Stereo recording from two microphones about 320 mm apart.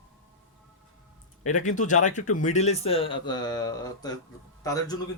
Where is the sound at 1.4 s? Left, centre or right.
Left.